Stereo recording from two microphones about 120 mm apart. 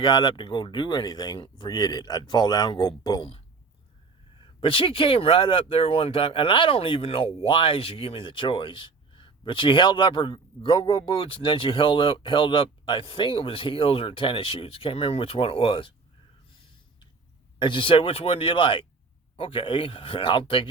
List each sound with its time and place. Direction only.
0.0 s speech: 40° left (ahead or behind)
17.6 s speech: 45° left (ahead or behind)